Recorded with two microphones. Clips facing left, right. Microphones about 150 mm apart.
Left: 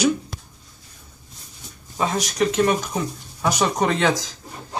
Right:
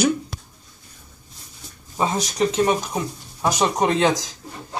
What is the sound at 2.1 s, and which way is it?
Speech, 25° right (ahead or behind).